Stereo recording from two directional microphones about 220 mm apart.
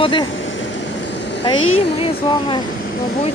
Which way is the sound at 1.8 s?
25° left (ahead or behind).